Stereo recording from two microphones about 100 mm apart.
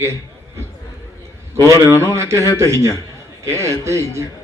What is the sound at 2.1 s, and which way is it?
A man's voice, 30° right (ahead or behind).